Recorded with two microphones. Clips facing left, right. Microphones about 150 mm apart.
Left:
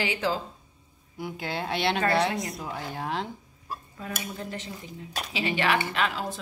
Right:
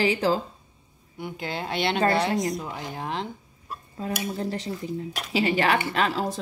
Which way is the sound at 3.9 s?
35° right (ahead or behind).